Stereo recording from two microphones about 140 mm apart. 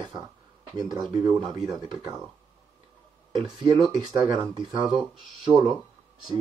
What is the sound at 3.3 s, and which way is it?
Speech, 30° right (ahead or behind).